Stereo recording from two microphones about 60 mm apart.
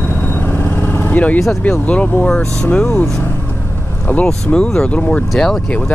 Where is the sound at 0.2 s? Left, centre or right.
Left.